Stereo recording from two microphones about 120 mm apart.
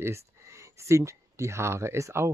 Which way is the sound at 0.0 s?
25° right (ahead or behind).